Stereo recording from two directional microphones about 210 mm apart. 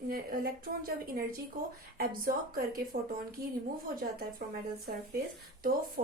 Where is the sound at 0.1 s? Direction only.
45° right (ahead or behind).